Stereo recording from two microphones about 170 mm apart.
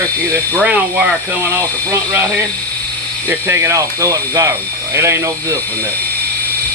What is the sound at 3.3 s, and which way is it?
Speech, 15° right (ahead or behind).